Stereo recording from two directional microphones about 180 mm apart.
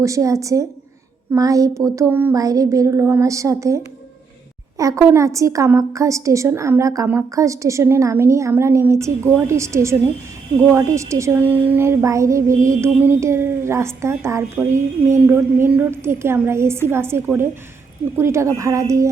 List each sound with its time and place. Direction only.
0.0 s a woman's voice: 15° right (ahead or behind)
4.8 s a woman's voice: 15° right (ahead or behind)
12.5 s mantra: 45° right (ahead or behind)
12.8 s a woman's voice: 10° right (ahead or behind)